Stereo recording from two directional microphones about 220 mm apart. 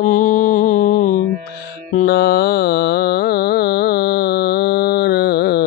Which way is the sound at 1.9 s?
45° left (ahead or behind).